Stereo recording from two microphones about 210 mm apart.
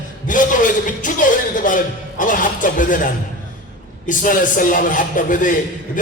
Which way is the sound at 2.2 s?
40° left (ahead or behind).